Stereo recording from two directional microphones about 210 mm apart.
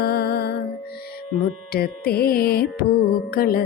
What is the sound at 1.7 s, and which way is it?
Music, 45° left (ahead or behind).